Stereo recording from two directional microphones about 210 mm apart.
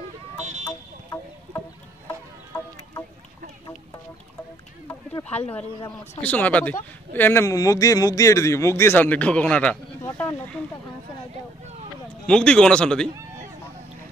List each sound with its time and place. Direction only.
0.7 s a sound: 15° left (ahead or behind)
2.0 s chicken: 15° left (ahead or behind)
4.8 s a sound: 10° left (ahead or behind)
5.6 s a man's voice: 25° left (ahead or behind)
6.2 s speech: 5° left (ahead or behind)
12.3 s speech: 5° left (ahead or behind)